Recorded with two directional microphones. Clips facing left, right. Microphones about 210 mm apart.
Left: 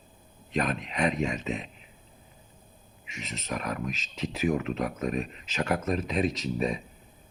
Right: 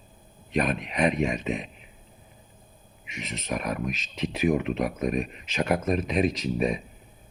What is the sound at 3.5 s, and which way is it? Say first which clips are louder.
Speech: right 3 dB; 15° right (ahead or behind).